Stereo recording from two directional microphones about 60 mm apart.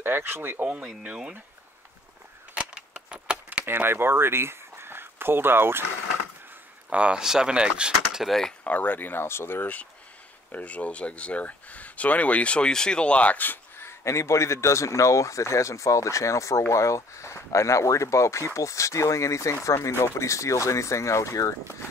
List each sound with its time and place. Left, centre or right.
0.0 s speech: right
0.6 s speech: right
2.5 s a sound: centre
3.6 s speech: right
6.9 s speech: centre
8.2 s speech: centre
8.6 s speech: left
10.5 s speech: left